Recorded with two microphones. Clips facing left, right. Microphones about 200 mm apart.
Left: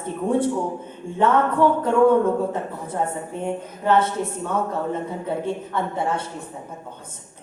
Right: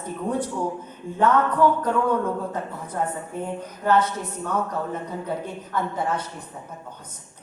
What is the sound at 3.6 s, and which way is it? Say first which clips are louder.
A woman's voice: left 1 dB; 25° left (ahead or behind).